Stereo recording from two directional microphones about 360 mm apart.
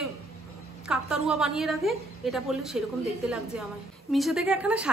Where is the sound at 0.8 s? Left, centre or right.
Centre.